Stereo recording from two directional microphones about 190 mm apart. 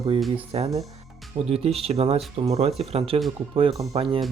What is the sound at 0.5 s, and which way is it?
Speech, 30° right (ahead or behind).